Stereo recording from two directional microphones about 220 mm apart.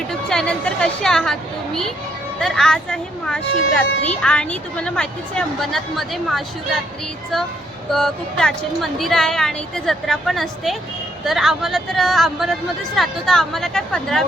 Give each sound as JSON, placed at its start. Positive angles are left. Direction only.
{"t": 0.1, "sound": "speech", "side_deg": 5}
{"t": 7.9, "sound": "speech", "side_deg": 5}